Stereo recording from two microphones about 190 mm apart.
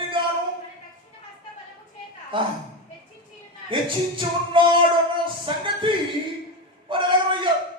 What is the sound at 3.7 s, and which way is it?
Music, 25° right (ahead or behind).